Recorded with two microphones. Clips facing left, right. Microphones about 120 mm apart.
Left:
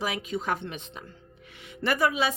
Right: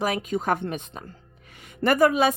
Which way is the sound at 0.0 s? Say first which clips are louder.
Right 5 dB; 45° right (ahead or behind).